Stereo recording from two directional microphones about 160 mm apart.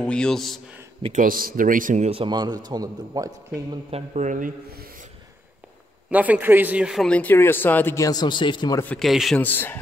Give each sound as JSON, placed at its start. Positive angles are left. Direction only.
{"t": 0.0, "sound": "speech", "side_deg": 5}
{"t": 1.1, "sound": "speech", "side_deg": -60}
{"t": 2.0, "sound": "a man's voice", "side_deg": -30}
{"t": 3.9, "sound": "a man's voice", "side_deg": -45}
{"t": 6.0, "sound": "speech", "side_deg": -10}
{"t": 8.8, "sound": "speech", "side_deg": 5}
{"t": 9.4, "sound": "speech", "side_deg": 10}